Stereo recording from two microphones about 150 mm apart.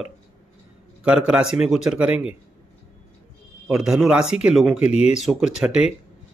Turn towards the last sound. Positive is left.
turn(degrees=-5)  # may be behind; listen again after turning